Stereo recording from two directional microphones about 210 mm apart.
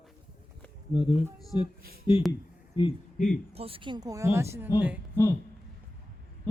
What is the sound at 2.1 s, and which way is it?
Speech, 25° left (ahead or behind).